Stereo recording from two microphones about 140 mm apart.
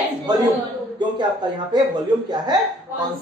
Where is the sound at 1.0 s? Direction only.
30° right (ahead or behind).